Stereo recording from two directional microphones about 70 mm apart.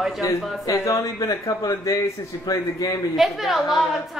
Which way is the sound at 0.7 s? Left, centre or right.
Left.